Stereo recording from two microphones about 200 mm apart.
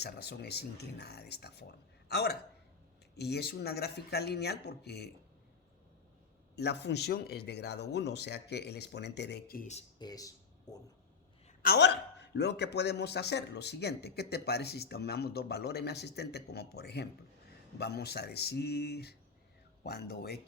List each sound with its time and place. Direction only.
0.0 s a man's voice: 55° left (ahead or behind)
6.6 s a man's voice: 55° left (ahead or behind)
10.0 s a sound: 20° left (ahead or behind)
11.6 s a man's voice: 55° left (ahead or behind)